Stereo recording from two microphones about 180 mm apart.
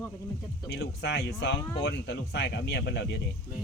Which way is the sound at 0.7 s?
75° left (ahead or behind).